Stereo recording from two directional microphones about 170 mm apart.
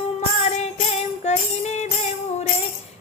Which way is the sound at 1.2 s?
40° left (ahead or behind).